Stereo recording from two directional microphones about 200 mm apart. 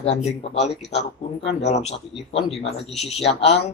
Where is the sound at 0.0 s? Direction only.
30° left (ahead or behind).